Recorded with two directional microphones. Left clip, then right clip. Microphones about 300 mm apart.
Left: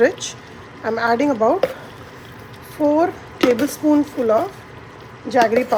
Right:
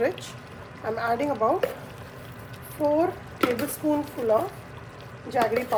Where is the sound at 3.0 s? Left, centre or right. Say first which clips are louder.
Left 7 dB; left.